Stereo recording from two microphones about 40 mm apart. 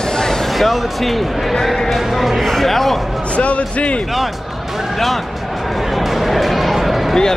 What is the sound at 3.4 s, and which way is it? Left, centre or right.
Speech, left.